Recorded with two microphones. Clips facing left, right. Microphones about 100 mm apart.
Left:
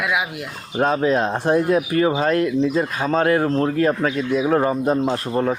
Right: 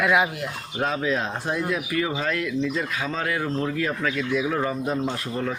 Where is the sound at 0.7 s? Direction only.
40° left (ahead or behind).